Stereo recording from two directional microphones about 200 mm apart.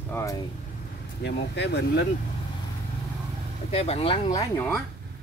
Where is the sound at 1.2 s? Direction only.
55° left (ahead or behind).